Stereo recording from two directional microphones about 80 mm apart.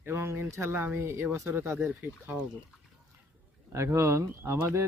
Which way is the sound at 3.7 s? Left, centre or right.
Right.